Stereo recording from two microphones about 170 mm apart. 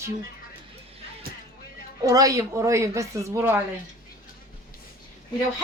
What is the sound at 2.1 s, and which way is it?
A woman's voice, 20° right (ahead or behind).